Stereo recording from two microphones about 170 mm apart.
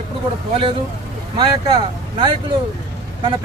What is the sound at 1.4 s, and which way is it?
Speech, 30° right (ahead or behind).